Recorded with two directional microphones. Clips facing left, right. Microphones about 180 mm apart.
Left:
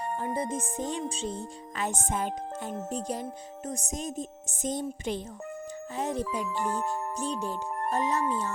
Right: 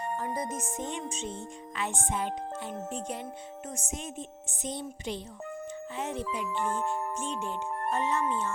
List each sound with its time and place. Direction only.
0.2 s music: 30° left (ahead or behind)
3.7 s speech: 35° left (ahead or behind)
6.0 s music: 40° left (ahead or behind)